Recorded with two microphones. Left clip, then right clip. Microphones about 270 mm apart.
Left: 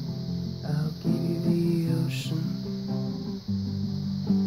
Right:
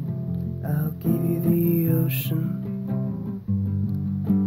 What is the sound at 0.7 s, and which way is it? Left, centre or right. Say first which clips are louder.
Music: right 4 dB; right.